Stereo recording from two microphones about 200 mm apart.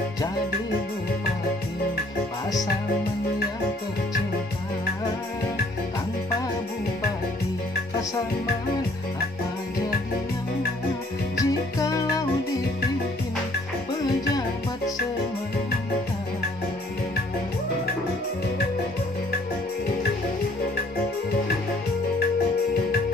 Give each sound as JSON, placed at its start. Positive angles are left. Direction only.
{"t": 11.3, "sound": "music", "side_deg": 15}